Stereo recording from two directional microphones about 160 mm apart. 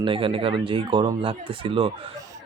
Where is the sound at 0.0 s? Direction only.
35° right (ahead or behind).